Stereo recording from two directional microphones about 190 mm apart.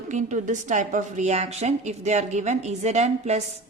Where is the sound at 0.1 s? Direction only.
40° right (ahead or behind).